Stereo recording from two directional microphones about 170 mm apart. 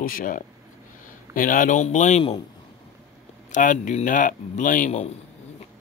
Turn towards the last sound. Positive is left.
turn(degrees=40)  # may be behind; listen again after turning